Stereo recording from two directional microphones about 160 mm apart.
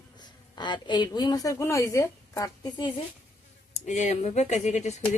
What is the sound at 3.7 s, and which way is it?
Speech, 50° left (ahead or behind).